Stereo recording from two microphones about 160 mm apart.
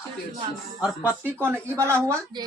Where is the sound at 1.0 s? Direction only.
15° right (ahead or behind).